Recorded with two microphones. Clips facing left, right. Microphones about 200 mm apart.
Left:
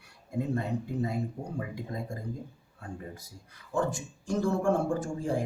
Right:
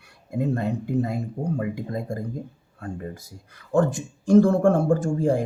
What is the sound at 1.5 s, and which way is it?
Speech, 70° right (ahead or behind).